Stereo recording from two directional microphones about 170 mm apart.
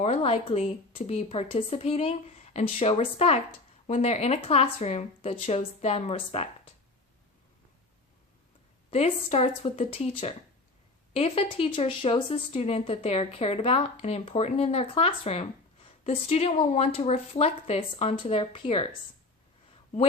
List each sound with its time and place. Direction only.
0.0 s speech: 40° left (ahead or behind)
8.9 s speech: 40° left (ahead or behind)